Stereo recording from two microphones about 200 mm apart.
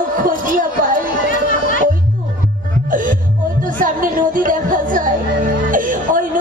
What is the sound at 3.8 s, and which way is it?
Music, 45° right (ahead or behind).